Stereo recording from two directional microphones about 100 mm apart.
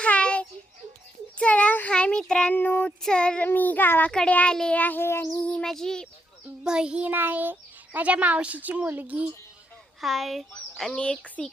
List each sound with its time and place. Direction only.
0.0 s a sound: 10° left (ahead or behind)
1.4 s child singing: 15° left (ahead or behind)
3.0 s speech: 10° left (ahead or behind)
5.4 s speech: 10° left (ahead or behind)
6.7 s a child's voice: 10° right (ahead or behind)
10.0 s a woman's voice: centre (ahead or behind)